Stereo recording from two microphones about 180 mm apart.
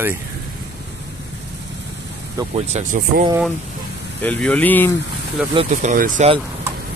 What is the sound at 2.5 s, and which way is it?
Speech, 35° right (ahead or behind).